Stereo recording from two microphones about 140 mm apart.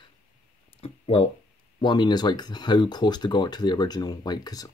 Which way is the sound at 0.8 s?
45° left (ahead or behind).